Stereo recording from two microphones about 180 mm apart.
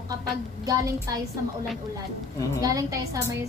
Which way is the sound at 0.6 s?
20° right (ahead or behind).